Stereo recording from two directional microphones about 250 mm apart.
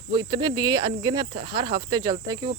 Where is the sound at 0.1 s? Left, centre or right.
Centre.